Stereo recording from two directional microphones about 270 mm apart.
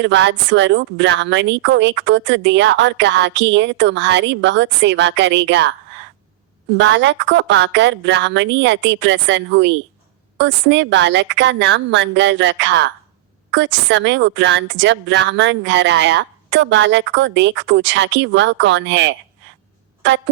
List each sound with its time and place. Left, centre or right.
0.0 s a woman's voice: right
6.7 s a woman's voice: right